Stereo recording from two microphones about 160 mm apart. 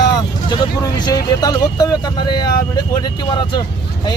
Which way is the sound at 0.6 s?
25° left (ahead or behind).